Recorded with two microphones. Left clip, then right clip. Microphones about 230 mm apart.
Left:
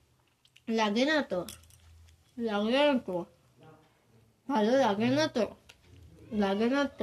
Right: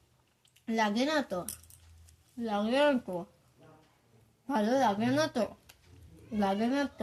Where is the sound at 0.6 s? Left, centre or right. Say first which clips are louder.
Left 2 dB; right.